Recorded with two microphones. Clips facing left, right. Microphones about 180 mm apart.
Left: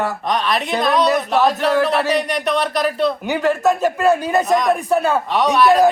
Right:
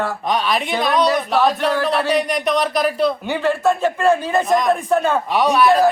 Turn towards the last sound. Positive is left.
turn(degrees=0)  # may be behind; listen again after turning